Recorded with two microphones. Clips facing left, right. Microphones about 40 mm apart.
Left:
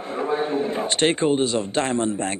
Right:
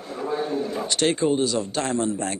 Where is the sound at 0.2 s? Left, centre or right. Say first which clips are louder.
Left 3 dB; left.